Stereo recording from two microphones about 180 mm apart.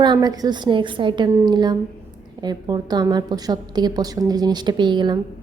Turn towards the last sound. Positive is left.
turn(degrees=-25)  # may be behind; listen again after turning